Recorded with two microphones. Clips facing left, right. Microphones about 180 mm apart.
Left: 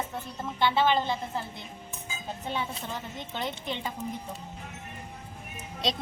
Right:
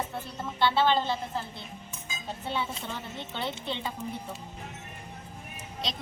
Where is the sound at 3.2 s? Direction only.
15° left (ahead or behind).